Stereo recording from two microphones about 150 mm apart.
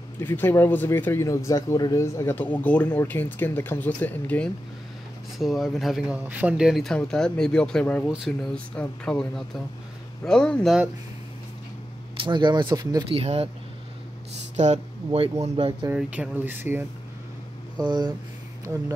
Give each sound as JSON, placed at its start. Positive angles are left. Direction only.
{"t": 0.2, "sound": "speech", "side_deg": 15}
{"t": 5.4, "sound": "speech", "side_deg": 0}
{"t": 12.2, "sound": "speech", "side_deg": -30}
{"t": 13.1, "sound": "speech", "side_deg": -40}
{"t": 14.6, "sound": "speech", "side_deg": -50}
{"t": 15.0, "sound": "speech", "side_deg": -35}
{"t": 15.9, "sound": "speech", "side_deg": -10}
{"t": 17.7, "sound": "speech", "side_deg": -25}